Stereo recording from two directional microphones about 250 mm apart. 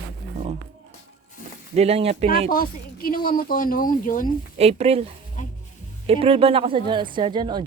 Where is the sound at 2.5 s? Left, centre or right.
Left.